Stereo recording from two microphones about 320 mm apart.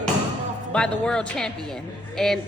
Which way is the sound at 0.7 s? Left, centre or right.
Centre.